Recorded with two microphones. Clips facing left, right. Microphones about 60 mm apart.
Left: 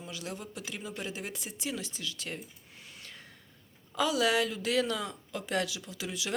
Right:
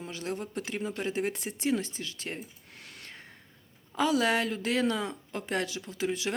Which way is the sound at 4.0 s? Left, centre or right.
Right.